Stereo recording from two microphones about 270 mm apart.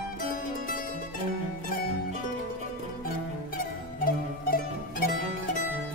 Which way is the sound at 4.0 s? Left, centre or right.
Left.